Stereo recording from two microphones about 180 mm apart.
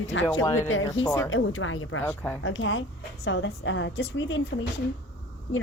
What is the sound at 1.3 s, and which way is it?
Speech, 90° left.